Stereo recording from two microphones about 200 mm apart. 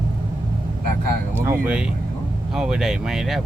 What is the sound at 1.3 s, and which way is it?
Speech, 10° right (ahead or behind).